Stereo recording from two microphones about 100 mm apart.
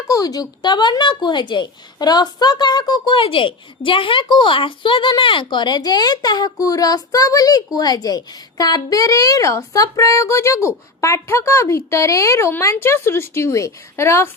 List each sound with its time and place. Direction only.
0.1 s a woman's voice: 35° left (ahead or behind)